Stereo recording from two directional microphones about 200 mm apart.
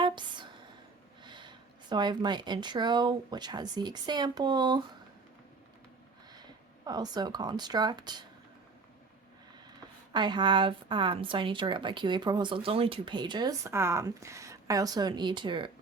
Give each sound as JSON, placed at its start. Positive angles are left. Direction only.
{"t": 0.0, "sound": "a sound", "side_deg": -25}
{"t": 1.2, "sound": "speech", "side_deg": -25}
{"t": 6.3, "sound": "speech", "side_deg": -20}
{"t": 10.1, "sound": "a woman's voice", "side_deg": -20}